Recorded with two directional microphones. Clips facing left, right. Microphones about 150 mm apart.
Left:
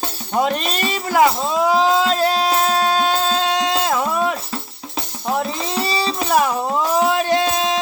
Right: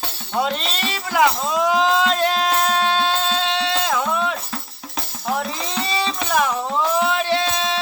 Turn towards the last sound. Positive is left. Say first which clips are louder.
# left 3 dB
turn(degrees=45)  # may be behind; listen again after turning